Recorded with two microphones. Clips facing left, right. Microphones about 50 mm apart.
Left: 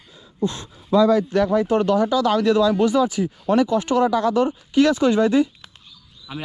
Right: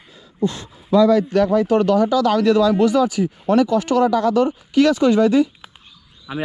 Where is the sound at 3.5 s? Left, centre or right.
Left.